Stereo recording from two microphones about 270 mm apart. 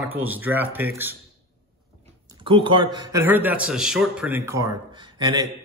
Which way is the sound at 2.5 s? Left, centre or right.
Centre.